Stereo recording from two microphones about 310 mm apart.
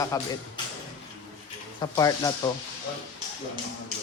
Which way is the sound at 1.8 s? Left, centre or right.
Centre.